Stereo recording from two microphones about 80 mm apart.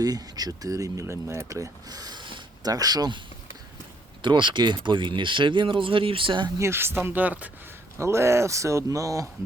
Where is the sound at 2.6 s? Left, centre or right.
Right.